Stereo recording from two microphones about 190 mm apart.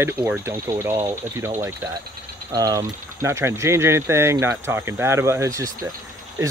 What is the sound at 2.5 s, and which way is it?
Speech, 20° right (ahead or behind).